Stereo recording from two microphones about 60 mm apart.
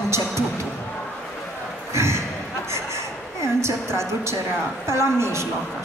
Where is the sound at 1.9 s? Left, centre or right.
Right.